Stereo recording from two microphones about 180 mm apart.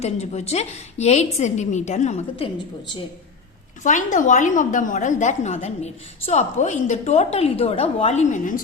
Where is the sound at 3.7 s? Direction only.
45° left (ahead or behind).